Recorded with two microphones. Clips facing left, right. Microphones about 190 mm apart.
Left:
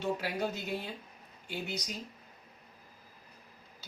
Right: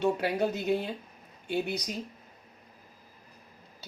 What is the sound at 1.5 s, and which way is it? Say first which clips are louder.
Speech: right 8 dB; 60° right (ahead or behind).